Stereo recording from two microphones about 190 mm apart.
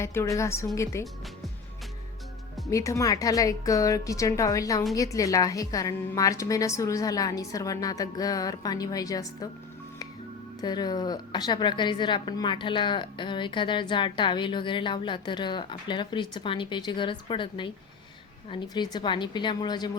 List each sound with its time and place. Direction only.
0.0 s speech: 15° left (ahead or behind)
2.6 s a woman's voice: 15° left (ahead or behind)
10.6 s a woman's voice: 20° left (ahead or behind)